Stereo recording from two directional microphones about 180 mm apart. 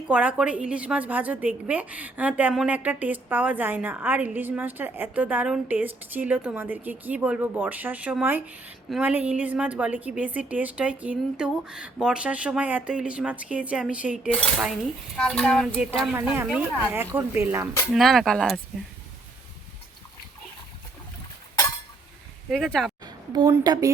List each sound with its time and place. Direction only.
0.1 s a woman's voice: 5° right (ahead or behind)
14.3 s cutlery: 5° left (ahead or behind)
15.2 s speech: 5° left (ahead or behind)
16.1 s a woman's voice: 15° right (ahead or behind)
17.9 s speech: centre (ahead or behind)
22.4 s speech: centre (ahead or behind)
23.0 s a woman's voice: 20° right (ahead or behind)